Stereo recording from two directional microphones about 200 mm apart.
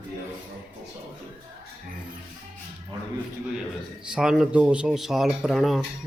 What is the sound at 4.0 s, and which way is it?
Speech, 5° right (ahead or behind).